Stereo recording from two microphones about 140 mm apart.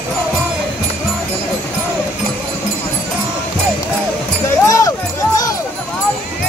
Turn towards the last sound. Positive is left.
turn(degrees=25)  # may be behind; listen again after turning